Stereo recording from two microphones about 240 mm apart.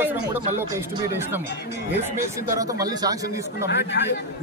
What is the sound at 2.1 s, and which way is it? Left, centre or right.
Speech, centre.